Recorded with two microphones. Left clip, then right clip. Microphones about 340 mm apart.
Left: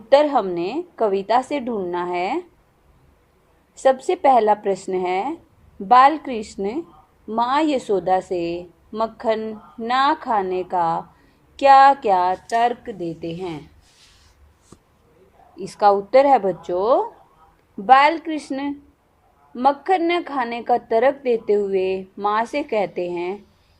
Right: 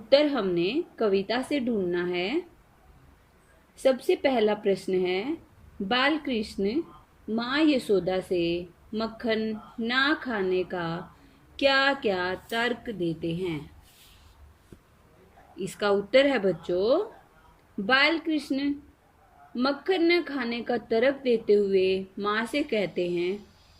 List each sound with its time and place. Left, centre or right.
0.1 s a woman's voice: centre
3.8 s a woman's voice: centre
15.5 s a woman's voice: centre
17.8 s a woman's voice: centre